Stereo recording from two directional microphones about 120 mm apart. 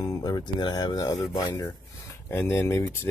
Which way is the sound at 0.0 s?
30° left (ahead or behind).